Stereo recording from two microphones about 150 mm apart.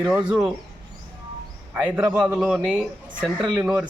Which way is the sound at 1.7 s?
5° right (ahead or behind).